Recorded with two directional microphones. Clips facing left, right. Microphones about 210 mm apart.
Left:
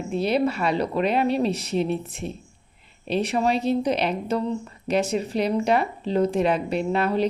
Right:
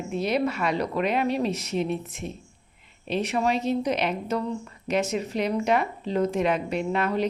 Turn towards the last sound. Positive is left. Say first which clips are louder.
# left 3 dB
turn(degrees=35)  # may be behind; listen again after turning